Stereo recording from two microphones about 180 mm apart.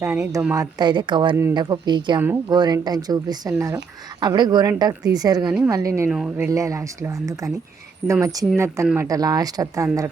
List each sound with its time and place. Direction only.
0.0 s speech: 15° right (ahead or behind)
6.1 s speech: 5° right (ahead or behind)